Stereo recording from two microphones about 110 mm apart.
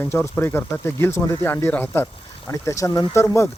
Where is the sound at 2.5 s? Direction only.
30° left (ahead or behind).